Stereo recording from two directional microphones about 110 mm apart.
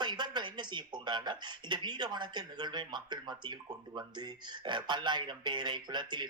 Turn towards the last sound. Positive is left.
turn(degrees=-40)  # may be behind; listen again after turning